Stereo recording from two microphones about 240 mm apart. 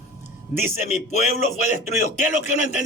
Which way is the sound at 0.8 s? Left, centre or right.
Left.